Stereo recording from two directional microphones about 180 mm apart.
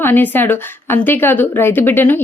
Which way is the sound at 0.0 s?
10° left (ahead or behind).